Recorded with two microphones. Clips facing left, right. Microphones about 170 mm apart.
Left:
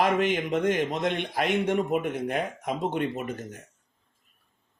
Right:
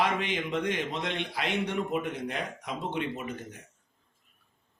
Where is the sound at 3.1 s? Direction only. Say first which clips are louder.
Left 4 dB; 55° left (ahead or behind).